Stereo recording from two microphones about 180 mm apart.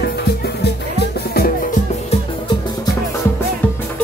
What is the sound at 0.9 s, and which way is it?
Music, 60° left (ahead or behind).